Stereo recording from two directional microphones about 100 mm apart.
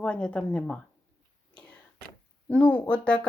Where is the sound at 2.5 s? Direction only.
15° left (ahead or behind).